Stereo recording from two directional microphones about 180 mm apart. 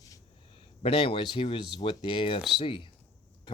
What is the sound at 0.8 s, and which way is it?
Speech, 30° left (ahead or behind).